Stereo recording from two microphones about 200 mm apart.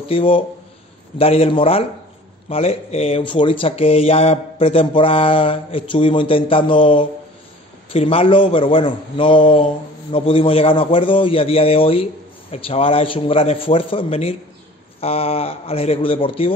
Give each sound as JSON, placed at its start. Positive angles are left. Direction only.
{"t": 0.0, "sound": "speech", "side_deg": 25}